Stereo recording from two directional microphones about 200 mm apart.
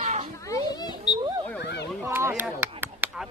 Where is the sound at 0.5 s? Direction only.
20° left (ahead or behind).